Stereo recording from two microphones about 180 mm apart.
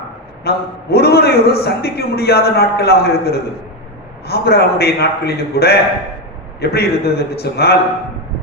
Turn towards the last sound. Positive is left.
turn(degrees=60)  # may be behind; listen again after turning